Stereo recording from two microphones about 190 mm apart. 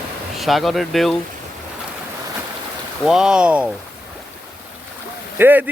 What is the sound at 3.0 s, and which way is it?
Speech, centre (ahead or behind).